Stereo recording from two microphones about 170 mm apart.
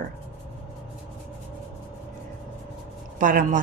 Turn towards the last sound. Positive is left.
turn(degrees=-55)  # may be behind; listen again after turning